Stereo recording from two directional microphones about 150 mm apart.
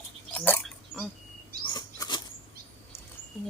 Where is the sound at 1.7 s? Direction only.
30° left (ahead or behind).